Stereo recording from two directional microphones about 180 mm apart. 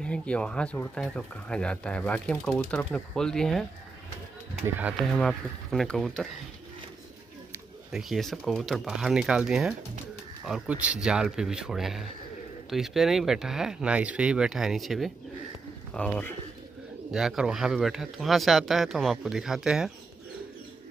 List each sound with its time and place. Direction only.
0.0 s speech: 5° left (ahead or behind)
4.6 s speech: 10° right (ahead or behind)
5.1 s speech: centre (ahead or behind)
7.5 s speech: centre (ahead or behind)
17.1 s speech: 5° right (ahead or behind)